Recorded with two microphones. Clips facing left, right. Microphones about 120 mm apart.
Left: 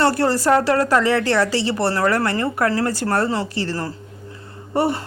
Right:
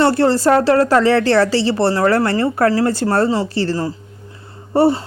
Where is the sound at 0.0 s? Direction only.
25° right (ahead or behind).